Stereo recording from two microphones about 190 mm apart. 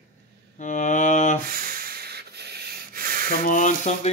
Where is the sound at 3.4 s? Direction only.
40° left (ahead or behind).